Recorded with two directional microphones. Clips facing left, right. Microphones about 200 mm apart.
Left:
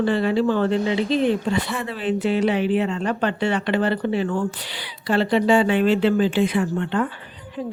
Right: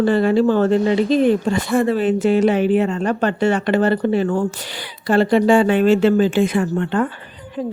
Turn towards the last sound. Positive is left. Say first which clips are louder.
# right 3 dB
turn(degrees=-50)  # may be behind; listen again after turning